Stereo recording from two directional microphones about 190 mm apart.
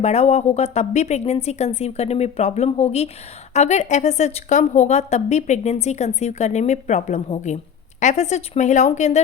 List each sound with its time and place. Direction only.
0.0 s a woman's voice: 35° left (ahead or behind)